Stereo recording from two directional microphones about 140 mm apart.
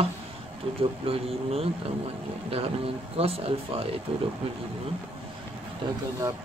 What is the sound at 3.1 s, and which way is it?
Speech, 45° right (ahead or behind).